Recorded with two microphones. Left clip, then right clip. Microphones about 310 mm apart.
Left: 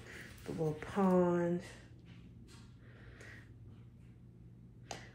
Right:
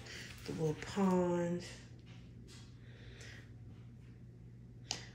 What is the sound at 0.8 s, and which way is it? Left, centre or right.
Speech, centre.